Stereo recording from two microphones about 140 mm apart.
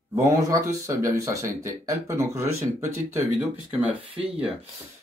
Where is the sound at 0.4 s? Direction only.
25° right (ahead or behind).